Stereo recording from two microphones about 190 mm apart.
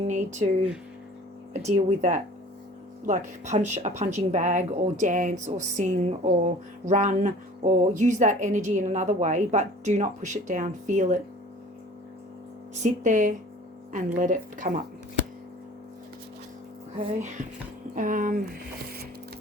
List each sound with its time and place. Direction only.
0.0 s speech: 40° right (ahead or behind)
1.5 s speech: 40° right (ahead or behind)
12.8 s speech: 40° right (ahead or behind)
17.0 s speech: 40° right (ahead or behind)